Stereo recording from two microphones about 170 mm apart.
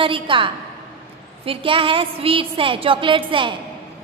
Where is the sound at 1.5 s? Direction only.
30° right (ahead or behind).